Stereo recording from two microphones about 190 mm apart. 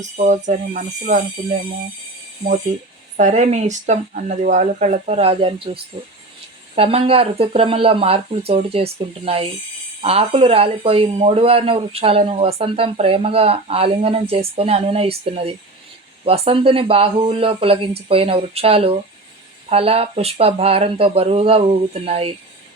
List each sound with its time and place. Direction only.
0.0 s speech: 40° right (ahead or behind)
3.2 s speech: 40° right (ahead or behind)
16.2 s speech: 30° right (ahead or behind)